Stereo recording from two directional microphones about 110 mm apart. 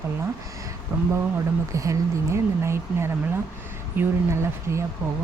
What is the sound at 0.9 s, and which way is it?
Speech, 25° right (ahead or behind).